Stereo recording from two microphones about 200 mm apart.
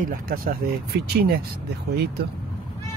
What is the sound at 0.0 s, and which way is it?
Speech, 45° right (ahead or behind).